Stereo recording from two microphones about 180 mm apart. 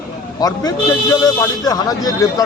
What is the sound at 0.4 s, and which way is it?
Speech, 20° left (ahead or behind).